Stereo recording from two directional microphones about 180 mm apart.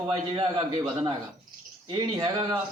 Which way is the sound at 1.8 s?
25° right (ahead or behind).